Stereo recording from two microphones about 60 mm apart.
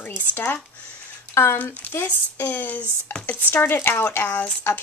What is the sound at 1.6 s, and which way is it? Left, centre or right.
Speech, left.